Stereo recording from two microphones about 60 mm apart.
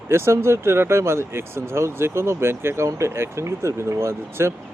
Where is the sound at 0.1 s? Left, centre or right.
Right.